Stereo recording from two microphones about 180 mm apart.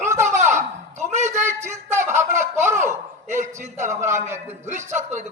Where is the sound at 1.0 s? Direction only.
40° right (ahead or behind).